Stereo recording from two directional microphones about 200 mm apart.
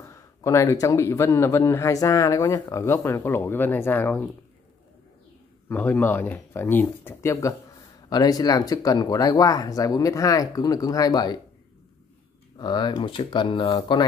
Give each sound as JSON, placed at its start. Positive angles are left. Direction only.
{"t": 0.1, "sound": "a man's voice", "side_deg": 15}
{"t": 5.7, "sound": "a man's voice", "side_deg": 10}
{"t": 12.5, "sound": "speech", "side_deg": 20}